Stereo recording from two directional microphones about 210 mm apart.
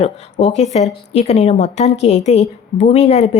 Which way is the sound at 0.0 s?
30° left (ahead or behind).